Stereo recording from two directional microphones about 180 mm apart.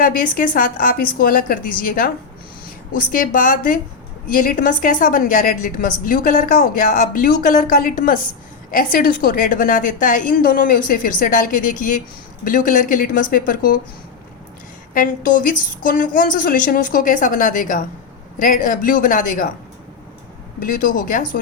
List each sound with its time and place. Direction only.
0.0 s a woman's voice: 50° left (ahead or behind)
14.9 s a woman's voice: 50° left (ahead or behind)
20.6 s a woman's voice: 50° left (ahead or behind)